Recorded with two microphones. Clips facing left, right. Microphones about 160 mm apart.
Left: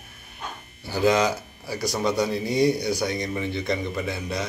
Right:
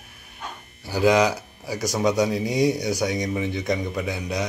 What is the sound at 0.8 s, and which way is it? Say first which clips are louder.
Speech: right 2 dB; 10° right (ahead or behind).